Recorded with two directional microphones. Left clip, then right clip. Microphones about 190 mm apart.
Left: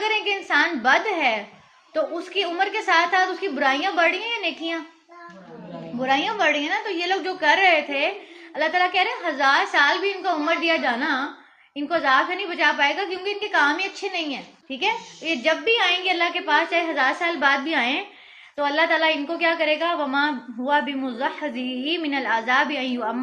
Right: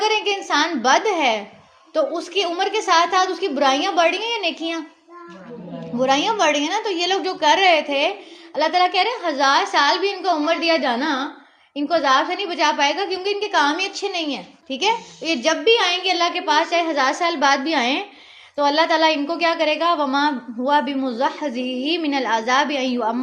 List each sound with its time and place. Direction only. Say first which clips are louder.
0.0 s a woman's voice: right 3 dB; 40° right (ahead or behind)
6.0 s a woman's voice: right 4 dB; 45° right (ahead or behind)